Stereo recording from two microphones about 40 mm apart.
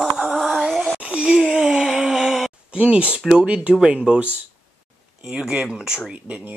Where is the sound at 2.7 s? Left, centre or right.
Right.